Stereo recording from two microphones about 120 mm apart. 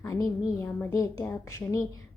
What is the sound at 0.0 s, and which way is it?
Speech, 30° left (ahead or behind).